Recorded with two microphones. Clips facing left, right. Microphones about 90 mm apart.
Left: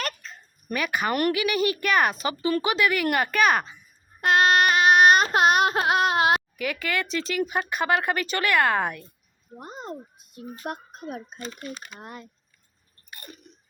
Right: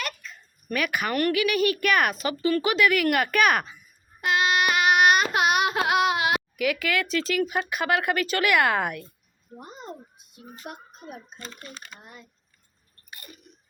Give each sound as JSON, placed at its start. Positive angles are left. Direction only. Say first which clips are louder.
{"t": 0.0, "sound": "a sound", "louder": "left 2 dB", "side_deg": 35}
{"t": 0.7, "sound": "speech", "louder": "left 1 dB", "side_deg": 0}
{"t": 4.2, "sound": "child singing", "louder": "left 4 dB", "side_deg": 40}
{"t": 6.6, "sound": "speech", "louder": "right 3 dB", "side_deg": -5}
{"t": 10.3, "sound": "speech", "louder": "left 6 dB", "side_deg": 50}
{"t": 11.5, "sound": "speech", "louder": "left 5 dB", "side_deg": 15}
{"t": 11.9, "sound": "speech", "louder": "left 7 dB", "side_deg": 60}
{"t": 13.1, "sound": "chewing", "louder": "left 3 dB", "side_deg": 35}